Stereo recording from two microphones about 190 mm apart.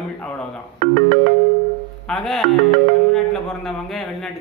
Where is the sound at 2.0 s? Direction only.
Centre (ahead or behind).